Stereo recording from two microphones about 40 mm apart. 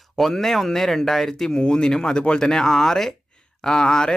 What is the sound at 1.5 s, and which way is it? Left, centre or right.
Speech, left.